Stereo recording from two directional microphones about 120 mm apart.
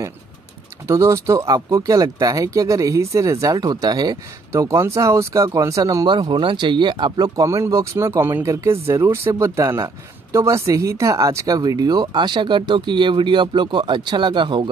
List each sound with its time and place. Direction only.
0.8 s speech: 25° right (ahead or behind)
6.0 s speech: 40° right (ahead or behind)